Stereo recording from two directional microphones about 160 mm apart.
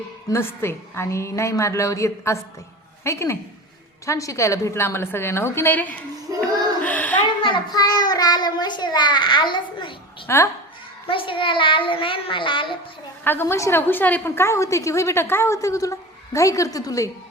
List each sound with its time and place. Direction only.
0.3 s a woman's voice: 15° left (ahead or behind)
6.4 s child singing: 10° left (ahead or behind)
7.4 s a child's voice: 30° left (ahead or behind)
10.2 s a woman's voice: 15° left (ahead or behind)
11.1 s a child's voice: 30° left (ahead or behind)
13.2 s a woman's voice: 15° left (ahead or behind)